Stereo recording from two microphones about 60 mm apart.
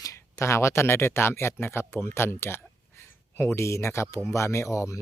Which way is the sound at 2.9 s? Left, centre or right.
Left.